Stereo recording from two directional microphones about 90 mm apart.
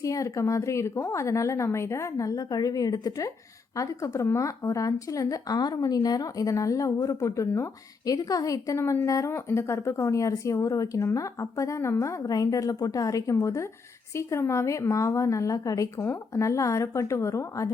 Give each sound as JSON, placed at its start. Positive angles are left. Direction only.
{"t": 0.0, "sound": "speech", "side_deg": 40}
{"t": 16.0, "sound": "speech", "side_deg": 30}